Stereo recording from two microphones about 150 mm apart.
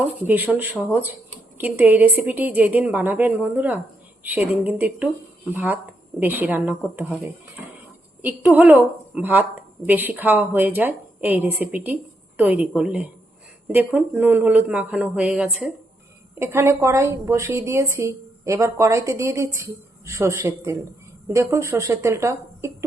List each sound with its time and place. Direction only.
0.3 s a woman's voice: 10° right (ahead or behind)
7.1 s a woman's voice: centre (ahead or behind)
16.4 s a woman's voice: 15° right (ahead or behind)